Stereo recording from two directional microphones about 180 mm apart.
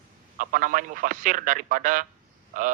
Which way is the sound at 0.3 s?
50° right (ahead or behind).